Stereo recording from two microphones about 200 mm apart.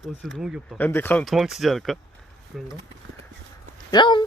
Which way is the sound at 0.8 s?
10° left (ahead or behind).